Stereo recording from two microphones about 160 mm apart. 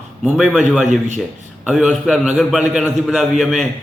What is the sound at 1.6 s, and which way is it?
A man's voice, 5° right (ahead or behind).